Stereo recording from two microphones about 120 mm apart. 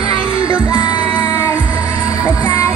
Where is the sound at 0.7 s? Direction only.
35° left (ahead or behind).